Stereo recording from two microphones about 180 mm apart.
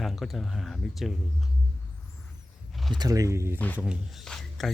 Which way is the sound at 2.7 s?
Centre (ahead or behind).